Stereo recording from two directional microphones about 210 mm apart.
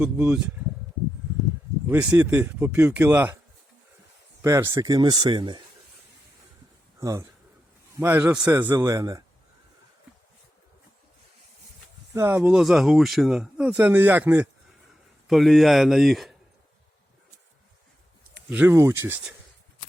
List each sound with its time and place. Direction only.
0.0 s speech: 5° right (ahead or behind)
1.9 s speech: 10° right (ahead or behind)
4.4 s speech: 15° right (ahead or behind)
7.0 s a man's voice: 15° right (ahead or behind)
12.1 s speech: 10° right (ahead or behind)
18.5 s speech: 10° right (ahead or behind)